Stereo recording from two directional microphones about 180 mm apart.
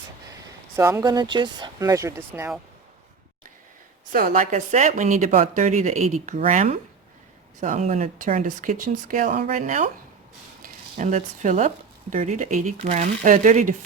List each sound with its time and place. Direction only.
0.8 s speech: 15° right (ahead or behind)
4.1 s a woman's voice: 50° right (ahead or behind)